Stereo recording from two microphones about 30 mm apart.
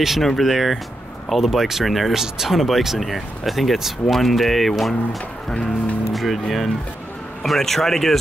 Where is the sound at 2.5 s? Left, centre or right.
Centre.